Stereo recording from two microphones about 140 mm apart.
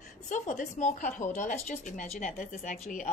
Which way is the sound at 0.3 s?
60° left (ahead or behind).